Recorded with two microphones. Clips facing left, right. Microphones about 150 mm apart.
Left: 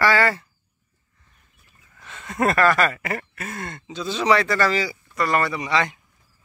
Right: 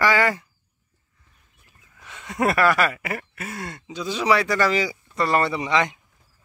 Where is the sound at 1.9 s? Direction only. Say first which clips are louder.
Left 1 dB; 10° right (ahead or behind).